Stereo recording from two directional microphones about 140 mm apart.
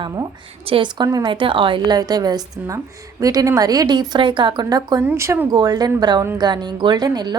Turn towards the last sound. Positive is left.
turn(degrees=-30)  # may be behind; listen again after turning